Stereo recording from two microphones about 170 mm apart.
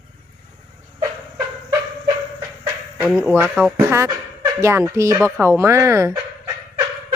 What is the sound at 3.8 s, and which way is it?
Speech, 15° right (ahead or behind).